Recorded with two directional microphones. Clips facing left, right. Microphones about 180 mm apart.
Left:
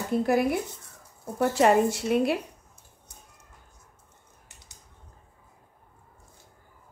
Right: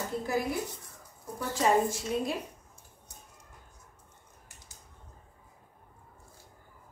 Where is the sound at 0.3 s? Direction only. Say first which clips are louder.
Left 6 dB; 65° left (ahead or behind).